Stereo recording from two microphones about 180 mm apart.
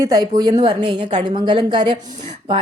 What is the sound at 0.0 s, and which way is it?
Speech, 20° right (ahead or behind).